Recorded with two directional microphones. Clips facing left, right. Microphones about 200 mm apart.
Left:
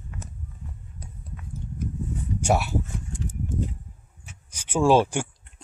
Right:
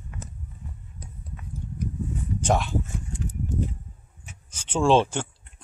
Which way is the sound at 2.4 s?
10° left (ahead or behind).